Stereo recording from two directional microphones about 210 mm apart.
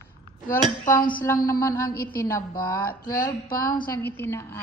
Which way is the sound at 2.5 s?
45° left (ahead or behind).